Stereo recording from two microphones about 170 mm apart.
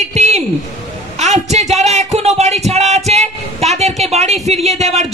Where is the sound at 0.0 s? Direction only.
40° right (ahead or behind).